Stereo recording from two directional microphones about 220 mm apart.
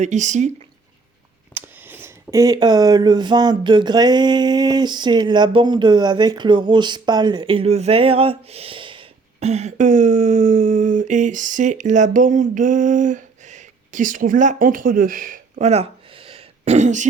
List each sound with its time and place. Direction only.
0.0 s speech: 35° right (ahead or behind)
1.5 s speech: 10° right (ahead or behind); by 17.1 s 35° right (ahead or behind)